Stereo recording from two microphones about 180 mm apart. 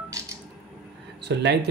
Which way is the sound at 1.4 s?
65° right (ahead or behind).